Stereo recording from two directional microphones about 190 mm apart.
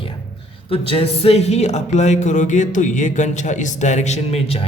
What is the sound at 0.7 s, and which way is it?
Speech, 30° left (ahead or behind).